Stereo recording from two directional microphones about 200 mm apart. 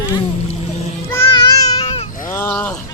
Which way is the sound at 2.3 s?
15° left (ahead or behind).